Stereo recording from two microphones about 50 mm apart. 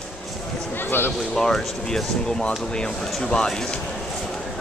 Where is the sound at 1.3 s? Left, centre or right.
Centre.